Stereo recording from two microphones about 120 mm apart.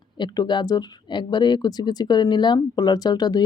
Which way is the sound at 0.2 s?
40° left (ahead or behind).